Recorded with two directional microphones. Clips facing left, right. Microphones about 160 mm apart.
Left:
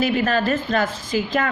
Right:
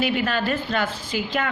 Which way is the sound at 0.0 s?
40° left (ahead or behind).